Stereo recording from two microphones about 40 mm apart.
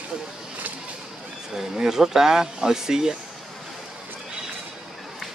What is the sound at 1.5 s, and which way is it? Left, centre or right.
Speech, centre.